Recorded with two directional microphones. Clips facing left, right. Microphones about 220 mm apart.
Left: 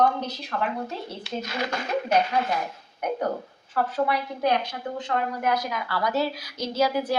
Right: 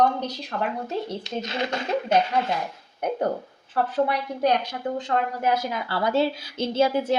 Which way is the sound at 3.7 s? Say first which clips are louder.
Right 1 dB; 35° right (ahead or behind).